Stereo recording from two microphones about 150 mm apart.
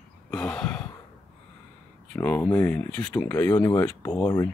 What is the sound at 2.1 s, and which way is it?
Speech, 10° left (ahead or behind).